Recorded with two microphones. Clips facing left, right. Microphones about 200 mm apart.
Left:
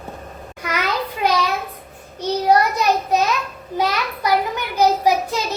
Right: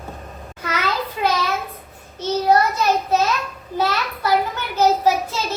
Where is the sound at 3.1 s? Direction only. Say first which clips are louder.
Even; 15° left (ahead or behind).